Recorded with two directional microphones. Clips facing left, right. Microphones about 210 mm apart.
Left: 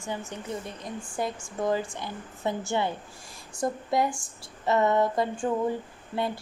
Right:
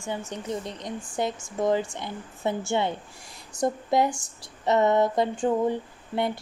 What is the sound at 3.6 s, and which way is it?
Speech, 25° right (ahead or behind).